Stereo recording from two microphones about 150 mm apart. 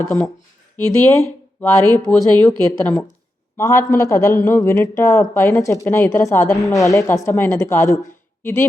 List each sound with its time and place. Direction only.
0.8 s a man's voice: 15° left (ahead or behind)